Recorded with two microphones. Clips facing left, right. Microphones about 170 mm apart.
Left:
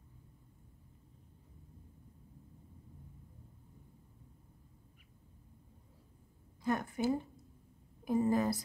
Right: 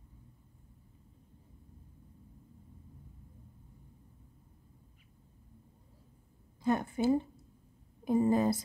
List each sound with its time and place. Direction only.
6.6 s a woman's voice: 25° right (ahead or behind)